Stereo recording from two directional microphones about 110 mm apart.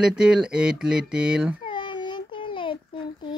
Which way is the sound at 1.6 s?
45° left (ahead or behind).